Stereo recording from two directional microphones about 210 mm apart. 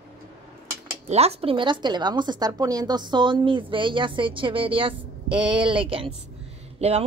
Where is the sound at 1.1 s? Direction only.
30° right (ahead or behind).